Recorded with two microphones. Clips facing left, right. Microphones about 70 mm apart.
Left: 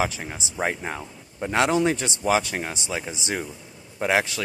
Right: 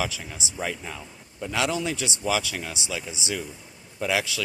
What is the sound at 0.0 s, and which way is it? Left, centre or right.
Speech, left.